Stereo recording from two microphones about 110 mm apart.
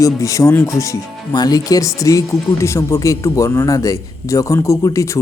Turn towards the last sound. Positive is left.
turn(degrees=30)  # may be behind; listen again after turning